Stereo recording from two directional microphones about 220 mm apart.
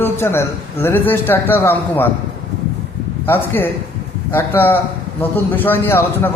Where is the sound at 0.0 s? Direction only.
10° left (ahead or behind).